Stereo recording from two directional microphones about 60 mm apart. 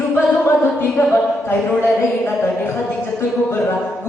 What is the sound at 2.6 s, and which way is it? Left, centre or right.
Speech, left.